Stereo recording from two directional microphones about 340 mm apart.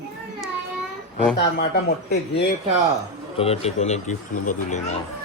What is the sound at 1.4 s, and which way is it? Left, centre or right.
Speech, left.